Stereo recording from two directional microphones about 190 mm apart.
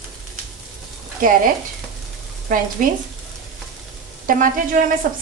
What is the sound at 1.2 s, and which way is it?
Speech, 45° right (ahead or behind).